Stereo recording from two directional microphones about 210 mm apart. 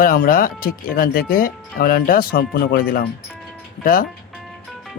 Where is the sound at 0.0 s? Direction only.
45° left (ahead or behind).